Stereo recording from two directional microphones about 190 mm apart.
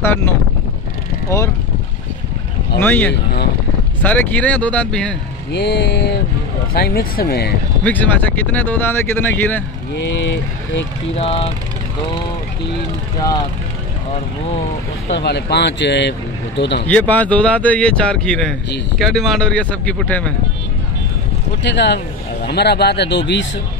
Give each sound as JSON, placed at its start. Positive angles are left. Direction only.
{"t": 0.0, "sound": "speech", "side_deg": 10}
{"t": 2.8, "sound": "speech", "side_deg": 10}
{"t": 5.5, "sound": "speech", "side_deg": 60}
{"t": 7.8, "sound": "speech", "side_deg": 10}
{"t": 11.1, "sound": "speech", "side_deg": 30}
{"t": 15.0, "sound": "speech", "side_deg": 65}
{"t": 16.8, "sound": "speech", "side_deg": 10}
{"t": 21.6, "sound": "a man's voice", "side_deg": 65}